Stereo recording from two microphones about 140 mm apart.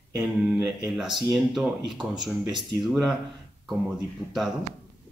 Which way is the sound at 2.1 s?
30° right (ahead or behind).